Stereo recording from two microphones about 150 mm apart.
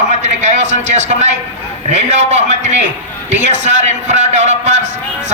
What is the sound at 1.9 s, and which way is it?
Speech, 50° right (ahead or behind).